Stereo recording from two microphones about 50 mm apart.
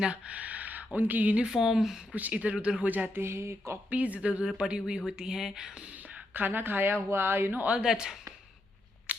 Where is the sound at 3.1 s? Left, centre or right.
Right.